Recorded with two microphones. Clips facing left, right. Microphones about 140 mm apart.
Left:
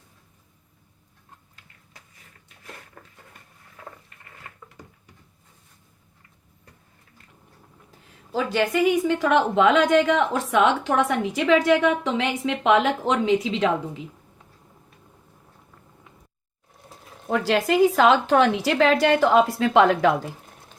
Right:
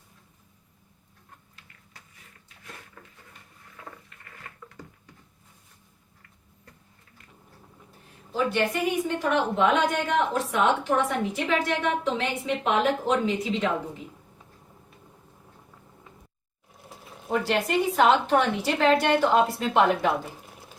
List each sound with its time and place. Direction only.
7.9 s a woman's voice: 90° left
17.3 s a woman's voice: 90° left